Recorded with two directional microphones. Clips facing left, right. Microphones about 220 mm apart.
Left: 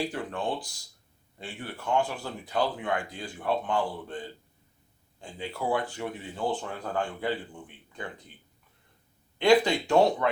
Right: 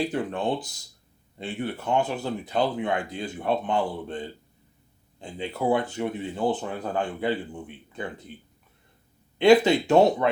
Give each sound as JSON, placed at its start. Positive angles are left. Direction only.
{"t": 0.0, "sound": "speech", "side_deg": -20}
{"t": 9.4, "sound": "speech", "side_deg": -20}